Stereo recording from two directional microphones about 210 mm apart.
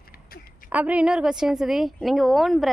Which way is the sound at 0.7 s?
5° right (ahead or behind).